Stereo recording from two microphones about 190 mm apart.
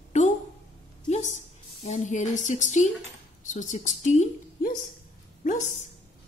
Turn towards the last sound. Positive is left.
turn(degrees=40)  # may be behind; listen again after turning